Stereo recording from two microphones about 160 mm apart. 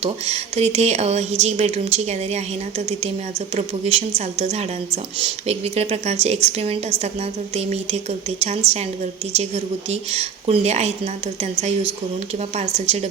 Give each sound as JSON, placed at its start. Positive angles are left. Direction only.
{"t": 0.0, "sound": "a woman's voice", "side_deg": -40}